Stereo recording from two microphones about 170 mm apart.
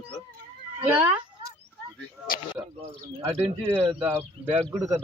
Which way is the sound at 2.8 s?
15° right (ahead or behind).